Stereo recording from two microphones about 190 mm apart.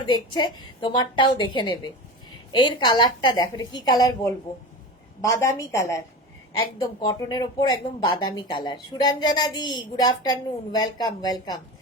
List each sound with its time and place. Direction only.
0.0 s a woman's voice: 25° left (ahead or behind)